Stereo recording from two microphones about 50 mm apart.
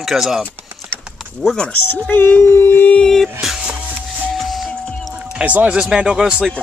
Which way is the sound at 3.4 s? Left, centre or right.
Centre.